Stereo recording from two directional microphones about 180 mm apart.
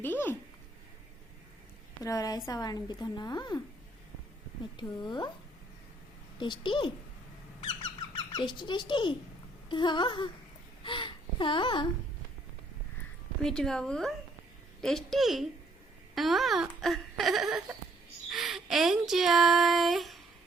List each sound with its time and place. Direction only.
0.0 s a child's voice: 10° left (ahead or behind)
2.0 s a woman's voice: 20° left (ahead or behind)
4.8 s a woman's voice: 25° left (ahead or behind)
6.4 s a woman's voice: 25° left (ahead or behind)
8.1 s a woman's voice: 30° left (ahead or behind)
13.4 s speech: 5° left (ahead or behind)